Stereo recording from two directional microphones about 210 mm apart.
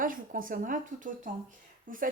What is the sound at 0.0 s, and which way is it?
A woman's voice, 40° right (ahead or behind).